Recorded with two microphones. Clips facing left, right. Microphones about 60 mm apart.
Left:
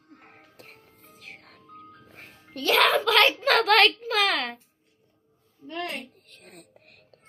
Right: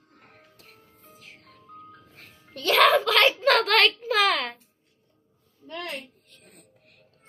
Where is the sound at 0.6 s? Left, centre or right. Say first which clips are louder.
Left 3 dB; left.